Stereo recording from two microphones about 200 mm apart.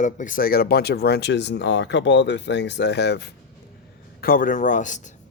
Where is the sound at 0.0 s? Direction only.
40° left (ahead or behind); by 3.3 s 55° left (ahead or behind).